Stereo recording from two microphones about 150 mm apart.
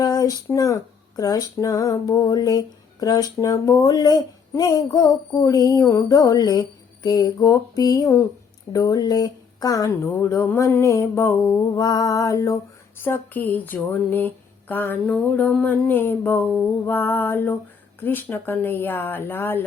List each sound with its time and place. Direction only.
0.0 s speech: 25° left (ahead or behind)
13.1 s mantra: 10° left (ahead or behind)